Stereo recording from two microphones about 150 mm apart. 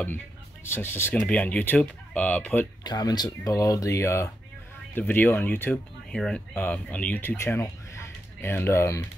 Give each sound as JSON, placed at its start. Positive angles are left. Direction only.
{"t": 0.7, "sound": "speech", "side_deg": 15}
{"t": 2.8, "sound": "speech", "side_deg": 25}